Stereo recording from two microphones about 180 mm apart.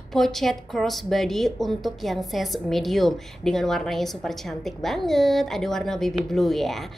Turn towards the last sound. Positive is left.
turn(degrees=0)  # may be behind; listen again after turning